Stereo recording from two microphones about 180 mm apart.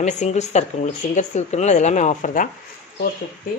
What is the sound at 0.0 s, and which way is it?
Speech, 40° left (ahead or behind).